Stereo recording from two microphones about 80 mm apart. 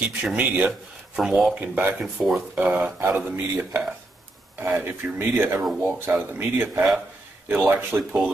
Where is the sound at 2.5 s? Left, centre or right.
Right.